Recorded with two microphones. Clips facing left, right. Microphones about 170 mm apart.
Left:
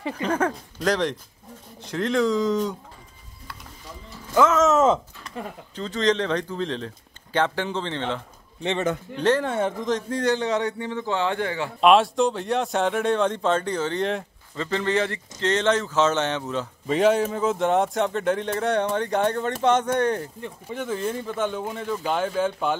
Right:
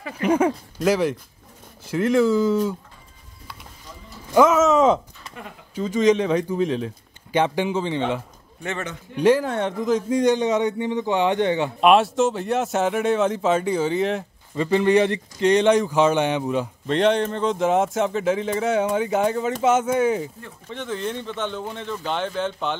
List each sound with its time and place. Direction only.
0.2 s a man's voice: 10° right (ahead or behind)
4.3 s speech: 15° right (ahead or behind)
4.6 s speech: centre (ahead or behind)
5.4 s speech: 30° left (ahead or behind)
5.8 s a man's voice: 10° right (ahead or behind)
9.5 s a man's voice: centre (ahead or behind); by 11.7 s 20° right (ahead or behind)
11.8 s speech: centre (ahead or behind)
14.5 s a man's voice: 15° right (ahead or behind)
16.8 s speech: 5° left (ahead or behind)
20.4 s speech: 10° left (ahead or behind)